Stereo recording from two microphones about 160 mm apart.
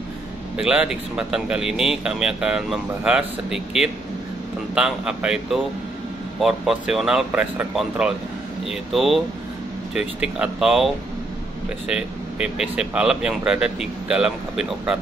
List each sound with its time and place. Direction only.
0.6 s speech: 5° right (ahead or behind)
11.9 s speech: 5° right (ahead or behind)